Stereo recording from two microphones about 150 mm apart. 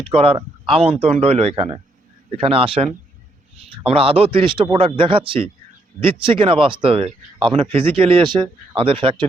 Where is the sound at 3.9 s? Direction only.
40° right (ahead or behind).